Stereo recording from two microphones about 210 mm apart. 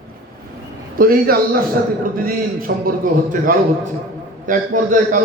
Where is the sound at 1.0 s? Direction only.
45° right (ahead or behind).